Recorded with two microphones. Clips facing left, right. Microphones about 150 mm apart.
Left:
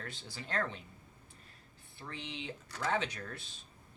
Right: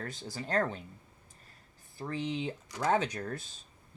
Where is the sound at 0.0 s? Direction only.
45° right (ahead or behind).